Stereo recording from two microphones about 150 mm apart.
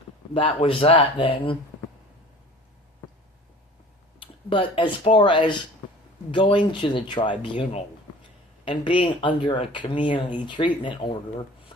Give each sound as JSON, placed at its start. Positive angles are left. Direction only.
{"t": 0.3, "sound": "speech", "side_deg": 40}
{"t": 4.2, "sound": "speech", "side_deg": 35}